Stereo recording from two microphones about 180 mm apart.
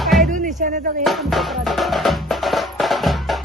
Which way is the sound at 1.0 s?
Centre (ahead or behind).